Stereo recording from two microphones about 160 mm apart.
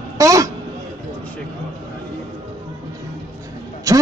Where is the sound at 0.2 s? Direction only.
20° right (ahead or behind).